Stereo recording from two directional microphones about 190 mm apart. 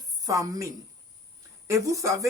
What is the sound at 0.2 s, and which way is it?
A woman's voice, 20° right (ahead or behind).